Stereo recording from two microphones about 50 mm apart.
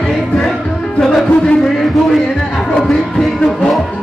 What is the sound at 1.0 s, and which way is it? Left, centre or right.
Music, centre.